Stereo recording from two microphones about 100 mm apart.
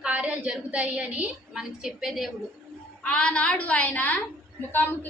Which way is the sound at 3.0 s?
10° left (ahead or behind).